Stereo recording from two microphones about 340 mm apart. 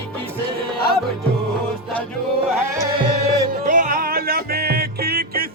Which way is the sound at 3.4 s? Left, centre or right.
Right.